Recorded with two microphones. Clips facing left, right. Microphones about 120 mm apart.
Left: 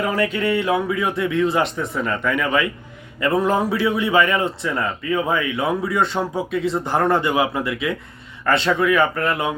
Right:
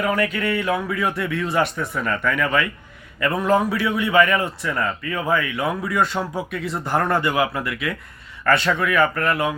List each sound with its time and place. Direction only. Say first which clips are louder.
0.0 s a man's voice: left 1 dB; 25° left (ahead or behind)